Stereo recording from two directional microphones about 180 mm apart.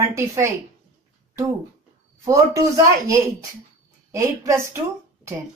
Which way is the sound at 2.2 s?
15° right (ahead or behind).